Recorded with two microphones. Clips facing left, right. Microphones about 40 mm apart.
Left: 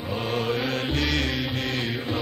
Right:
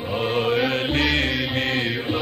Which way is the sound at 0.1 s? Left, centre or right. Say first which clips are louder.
Right 5 dB; right.